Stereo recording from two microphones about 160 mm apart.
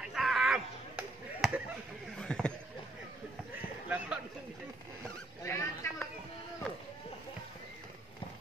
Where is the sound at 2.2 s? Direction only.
5° left (ahead or behind).